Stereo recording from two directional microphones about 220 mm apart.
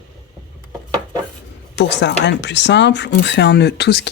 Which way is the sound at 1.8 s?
55° left (ahead or behind).